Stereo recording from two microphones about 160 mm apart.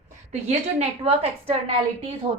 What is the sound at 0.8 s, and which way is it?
Speech, 40° right (ahead or behind).